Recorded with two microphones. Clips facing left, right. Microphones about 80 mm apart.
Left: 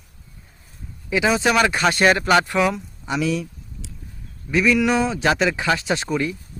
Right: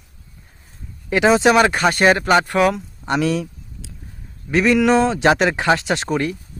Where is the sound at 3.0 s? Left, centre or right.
Right.